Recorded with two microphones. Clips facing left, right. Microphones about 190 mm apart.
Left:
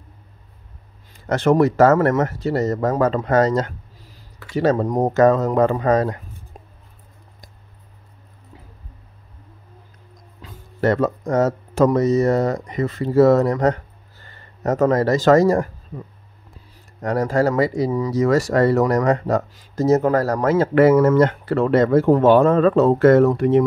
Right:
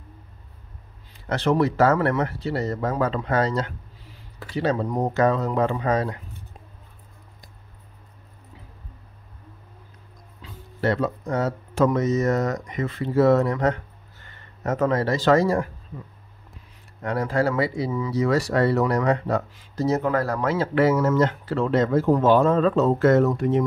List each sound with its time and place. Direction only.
1.1 s speech: 45° left (ahead or behind)
10.4 s speech: 45° left (ahead or behind); by 23.6 s 65° left (ahead or behind)